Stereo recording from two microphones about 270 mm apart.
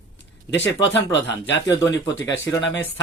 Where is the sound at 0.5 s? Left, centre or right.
Left.